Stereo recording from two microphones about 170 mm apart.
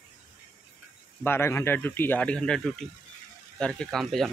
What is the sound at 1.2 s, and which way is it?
A man's voice, 15° left (ahead or behind).